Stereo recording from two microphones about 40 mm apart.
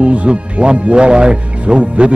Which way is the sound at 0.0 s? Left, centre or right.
Right.